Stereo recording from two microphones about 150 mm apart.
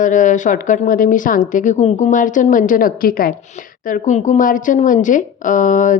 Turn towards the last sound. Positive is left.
turn(degrees=60)  # may be behind; listen again after turning